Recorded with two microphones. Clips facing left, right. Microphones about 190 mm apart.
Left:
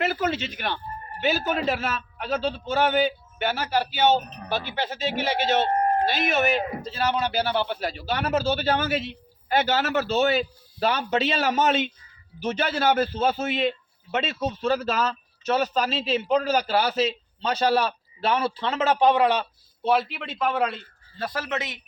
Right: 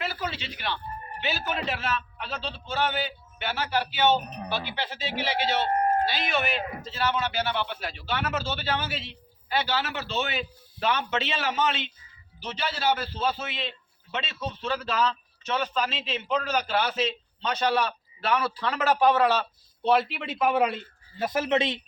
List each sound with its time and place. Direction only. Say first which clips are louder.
0.0 s a man's voice: left 8 dB; 50° left (ahead or behind); by 19.5 s 15° left (ahead or behind)
19.8 s speech: even; centre (ahead or behind); by 21.8 s 25° right (ahead or behind)